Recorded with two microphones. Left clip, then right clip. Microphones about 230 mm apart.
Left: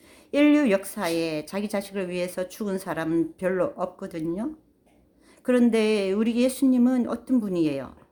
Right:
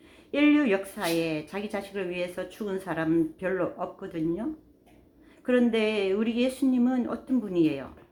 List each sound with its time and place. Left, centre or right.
0.3 s speech: left
5.5 s speech: left